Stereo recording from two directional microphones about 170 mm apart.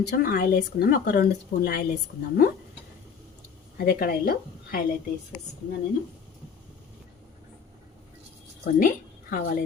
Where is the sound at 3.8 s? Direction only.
60° left (ahead or behind).